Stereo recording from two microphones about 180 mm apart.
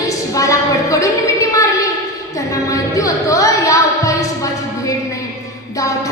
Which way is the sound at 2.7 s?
20° left (ahead or behind).